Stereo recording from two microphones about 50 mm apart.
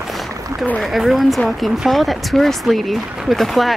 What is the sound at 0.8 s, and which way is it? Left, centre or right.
Speech, centre.